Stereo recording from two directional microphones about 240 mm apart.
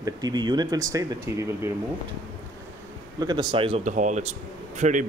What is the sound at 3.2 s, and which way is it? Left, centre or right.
Speech, centre.